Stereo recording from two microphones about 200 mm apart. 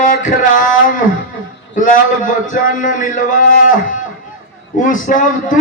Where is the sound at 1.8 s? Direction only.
40° left (ahead or behind).